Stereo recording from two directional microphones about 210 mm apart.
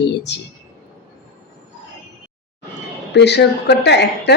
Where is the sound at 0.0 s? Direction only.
55° left (ahead or behind).